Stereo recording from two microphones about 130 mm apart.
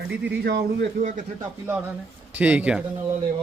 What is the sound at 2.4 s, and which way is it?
Speech, 15° right (ahead or behind).